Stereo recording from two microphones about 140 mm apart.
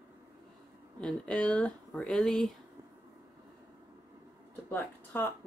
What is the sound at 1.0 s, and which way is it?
Speech, 10° left (ahead or behind).